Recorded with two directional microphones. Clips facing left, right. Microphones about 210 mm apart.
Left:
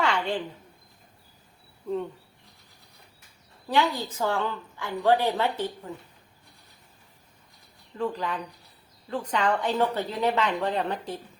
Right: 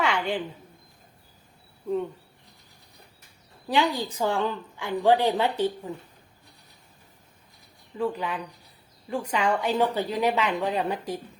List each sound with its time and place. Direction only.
0.0 s a sound: 10° right (ahead or behind)
3.7 s a woman's voice: 15° right (ahead or behind)
7.9 s a woman's voice: 10° right (ahead or behind)